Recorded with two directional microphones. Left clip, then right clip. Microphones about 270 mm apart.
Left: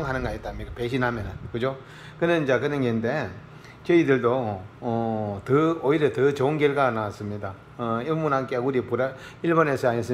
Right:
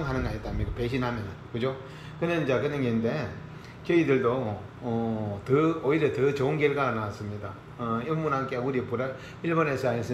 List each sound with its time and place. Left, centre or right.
0.0 s a man's voice: centre